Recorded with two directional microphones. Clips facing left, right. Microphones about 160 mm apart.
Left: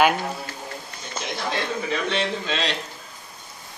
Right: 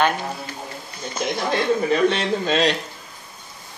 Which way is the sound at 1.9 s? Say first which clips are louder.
Right 6 dB; 45° right (ahead or behind).